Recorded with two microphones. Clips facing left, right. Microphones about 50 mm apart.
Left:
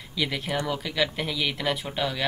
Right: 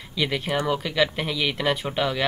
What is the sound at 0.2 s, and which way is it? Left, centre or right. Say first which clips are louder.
Speech: right 3 dB; centre.